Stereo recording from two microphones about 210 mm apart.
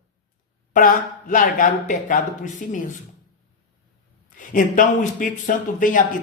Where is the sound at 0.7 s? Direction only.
40° left (ahead or behind).